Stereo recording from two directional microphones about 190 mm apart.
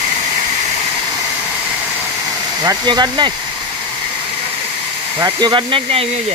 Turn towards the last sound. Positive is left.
turn(degrees=-30)  # may be behind; listen again after turning